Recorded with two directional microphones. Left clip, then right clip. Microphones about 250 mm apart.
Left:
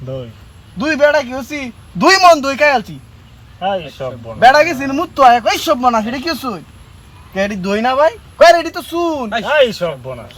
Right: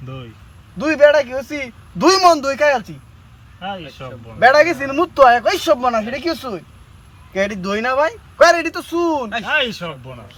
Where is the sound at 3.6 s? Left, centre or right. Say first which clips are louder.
Left 10 dB; centre.